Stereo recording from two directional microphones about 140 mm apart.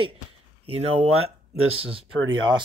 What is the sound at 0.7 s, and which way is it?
Speech, 45° right (ahead or behind).